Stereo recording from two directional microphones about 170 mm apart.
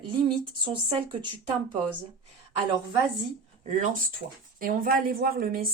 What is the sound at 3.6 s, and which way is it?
Speech, 45° right (ahead or behind).